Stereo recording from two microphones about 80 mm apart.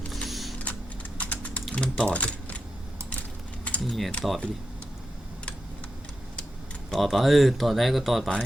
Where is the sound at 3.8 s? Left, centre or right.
Centre.